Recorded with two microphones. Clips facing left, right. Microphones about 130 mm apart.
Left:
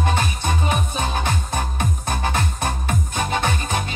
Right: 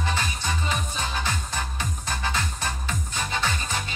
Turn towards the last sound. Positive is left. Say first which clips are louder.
# left 6 dB
turn(degrees=55)  # may be behind; listen again after turning